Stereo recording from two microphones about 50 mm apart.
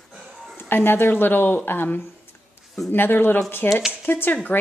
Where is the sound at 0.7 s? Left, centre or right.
Left.